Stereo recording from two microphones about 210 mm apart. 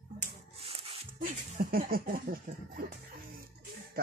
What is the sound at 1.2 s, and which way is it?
Speech, 45° right (ahead or behind).